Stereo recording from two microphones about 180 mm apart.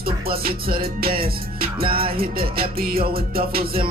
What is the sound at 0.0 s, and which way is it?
Music, 55° right (ahead or behind).